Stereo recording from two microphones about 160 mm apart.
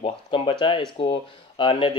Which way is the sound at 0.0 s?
35° left (ahead or behind).